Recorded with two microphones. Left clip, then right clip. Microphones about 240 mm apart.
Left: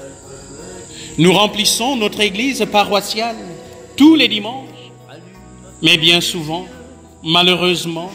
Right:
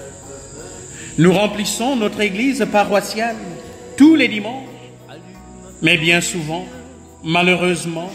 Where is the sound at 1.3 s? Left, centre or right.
Centre.